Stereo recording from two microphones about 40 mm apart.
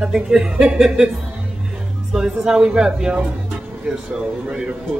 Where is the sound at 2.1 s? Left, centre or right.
Right.